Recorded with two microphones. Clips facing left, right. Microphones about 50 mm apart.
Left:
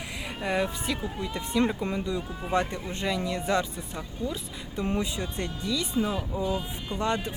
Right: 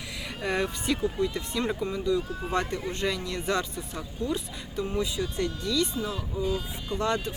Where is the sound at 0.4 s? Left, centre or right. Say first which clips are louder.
Even; centre.